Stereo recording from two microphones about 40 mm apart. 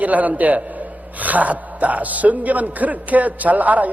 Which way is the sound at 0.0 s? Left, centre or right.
Right.